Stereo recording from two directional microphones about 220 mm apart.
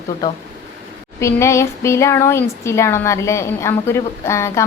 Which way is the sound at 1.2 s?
15° left (ahead or behind).